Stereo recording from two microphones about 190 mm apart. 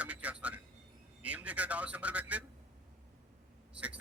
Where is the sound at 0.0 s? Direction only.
5° right (ahead or behind).